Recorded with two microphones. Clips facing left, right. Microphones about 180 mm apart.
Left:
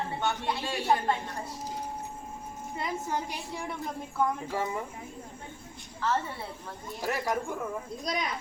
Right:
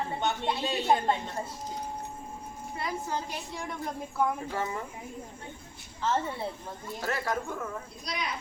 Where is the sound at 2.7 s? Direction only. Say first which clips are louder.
Left 1 dB; 20° left (ahead or behind).